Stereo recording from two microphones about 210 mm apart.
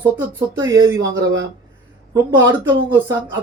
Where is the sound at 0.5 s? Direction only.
20° right (ahead or behind).